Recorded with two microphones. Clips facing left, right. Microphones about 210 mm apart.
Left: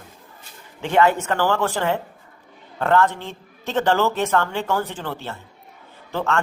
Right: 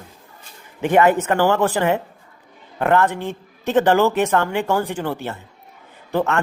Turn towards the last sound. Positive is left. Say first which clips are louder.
# right 4 dB
turn(degrees=-15)  # may be behind; listen again after turning